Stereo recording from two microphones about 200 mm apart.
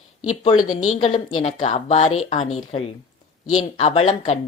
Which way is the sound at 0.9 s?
35° left (ahead or behind).